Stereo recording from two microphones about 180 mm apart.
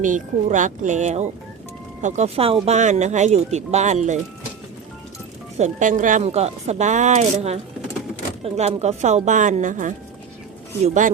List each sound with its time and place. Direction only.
0.0 s speech: 45° right (ahead or behind)
5.5 s speech: 45° right (ahead or behind)